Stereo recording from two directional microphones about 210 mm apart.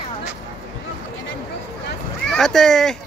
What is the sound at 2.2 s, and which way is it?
Speech, centre (ahead or behind).